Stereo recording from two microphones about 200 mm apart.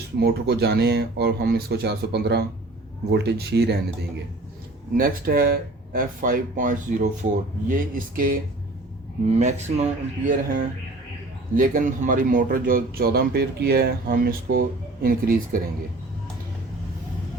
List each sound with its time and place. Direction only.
0.2 s speech: 55° right (ahead or behind)
4.9 s speech: 45° right (ahead or behind)
9.2 s speech: 35° right (ahead or behind)